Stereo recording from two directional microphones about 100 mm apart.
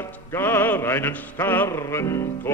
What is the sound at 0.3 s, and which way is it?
Music, 20° left (ahead or behind).